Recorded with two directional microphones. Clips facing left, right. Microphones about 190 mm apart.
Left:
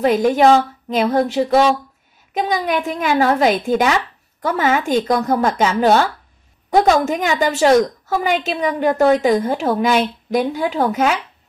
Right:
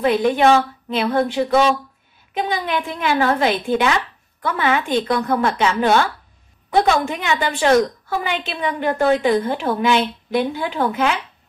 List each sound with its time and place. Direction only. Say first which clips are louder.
0.0 s a woman's voice: left 2 dB; 40° left (ahead or behind)